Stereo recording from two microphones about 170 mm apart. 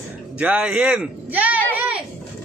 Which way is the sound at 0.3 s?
5° right (ahead or behind).